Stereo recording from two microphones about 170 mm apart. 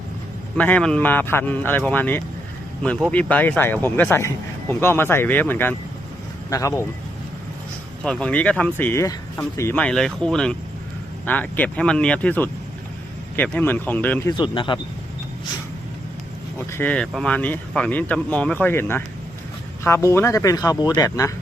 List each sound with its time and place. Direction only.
0.5 s speech: 10° left (ahead or behind)
8.0 s speech: 5° left (ahead or behind)
14.3 s speech: 30° left (ahead or behind)
16.7 s speech: 10° left (ahead or behind)